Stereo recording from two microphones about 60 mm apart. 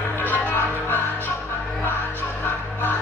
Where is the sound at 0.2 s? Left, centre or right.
Left.